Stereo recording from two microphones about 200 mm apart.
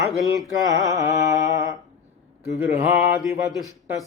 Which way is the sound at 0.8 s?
15° right (ahead or behind).